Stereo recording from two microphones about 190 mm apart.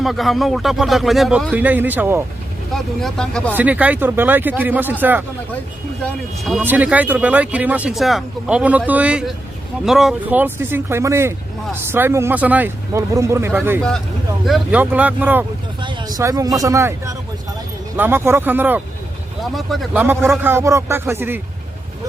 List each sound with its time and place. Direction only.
0.0 s speech: centre (ahead or behind)
2.7 s speech: centre (ahead or behind)
3.5 s speech: 10° right (ahead or behind)
6.6 s speech: 10° right (ahead or behind)
15.8 s speech: 25° right (ahead or behind)
19.4 s speech: centre (ahead or behind)
19.9 s speech: 10° right (ahead or behind)